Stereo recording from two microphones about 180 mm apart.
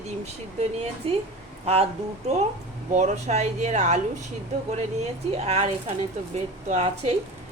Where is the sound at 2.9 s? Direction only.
40° right (ahead or behind).